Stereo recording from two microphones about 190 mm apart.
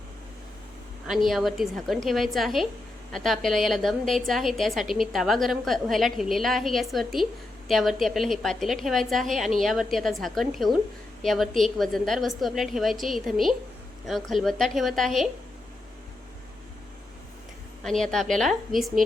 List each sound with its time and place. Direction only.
1.0 s a woman's voice: centre (ahead or behind)
17.8 s a woman's voice: centre (ahead or behind)